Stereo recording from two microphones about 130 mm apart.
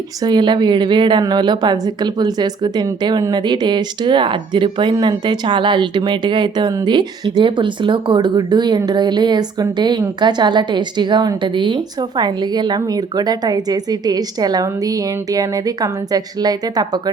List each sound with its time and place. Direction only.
0.2 s speech: 35° right (ahead or behind)